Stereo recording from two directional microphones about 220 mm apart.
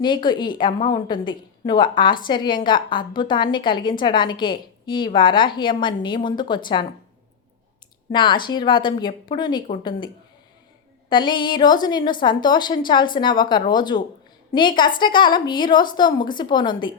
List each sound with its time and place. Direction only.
0.0 s a woman's voice: 20° left (ahead or behind)
8.1 s a woman's voice: 20° left (ahead or behind)
11.1 s a woman's voice: 20° left (ahead or behind)